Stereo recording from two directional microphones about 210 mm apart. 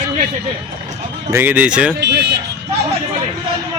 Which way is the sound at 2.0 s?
55° right (ahead or behind).